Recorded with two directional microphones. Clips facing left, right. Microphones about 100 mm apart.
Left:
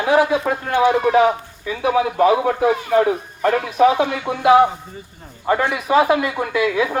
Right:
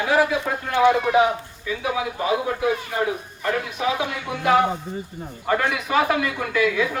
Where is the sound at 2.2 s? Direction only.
60° left (ahead or behind).